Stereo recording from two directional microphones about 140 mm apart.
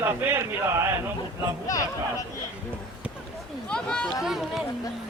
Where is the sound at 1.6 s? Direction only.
25° left (ahead or behind).